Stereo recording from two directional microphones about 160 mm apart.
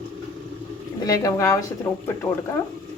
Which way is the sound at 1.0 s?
20° left (ahead or behind).